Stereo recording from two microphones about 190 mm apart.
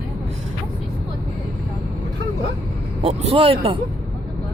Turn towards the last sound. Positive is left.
turn(degrees=-30)  # may be behind; listen again after turning